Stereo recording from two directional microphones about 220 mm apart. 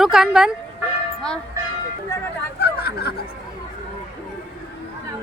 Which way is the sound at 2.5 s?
45° left (ahead or behind).